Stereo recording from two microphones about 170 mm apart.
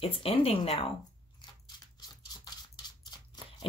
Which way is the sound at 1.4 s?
25° left (ahead or behind).